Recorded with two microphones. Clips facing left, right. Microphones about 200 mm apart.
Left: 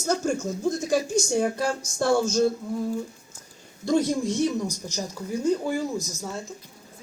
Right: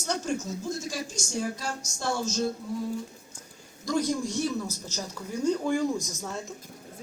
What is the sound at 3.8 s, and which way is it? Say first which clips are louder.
Speech: left 5 dB; 25° left (ahead or behind).